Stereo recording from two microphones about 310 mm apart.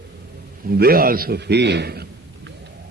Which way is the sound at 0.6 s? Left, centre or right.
Right.